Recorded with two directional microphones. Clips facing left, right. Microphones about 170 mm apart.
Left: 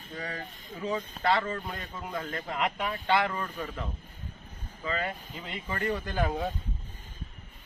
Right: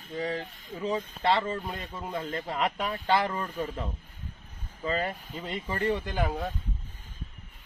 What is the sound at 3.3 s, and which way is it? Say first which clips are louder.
Speech: right 3 dB; 20° right (ahead or behind).